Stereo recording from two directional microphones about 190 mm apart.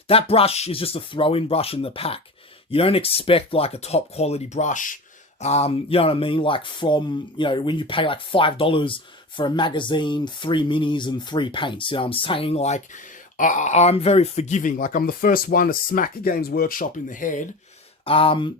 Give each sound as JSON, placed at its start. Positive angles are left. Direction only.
{"t": 0.1, "sound": "speech", "side_deg": 30}
{"t": 18.0, "sound": "speech", "side_deg": 30}